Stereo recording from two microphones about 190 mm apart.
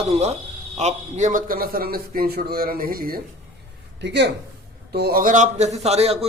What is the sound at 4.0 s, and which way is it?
A man's voice, 65° right (ahead or behind).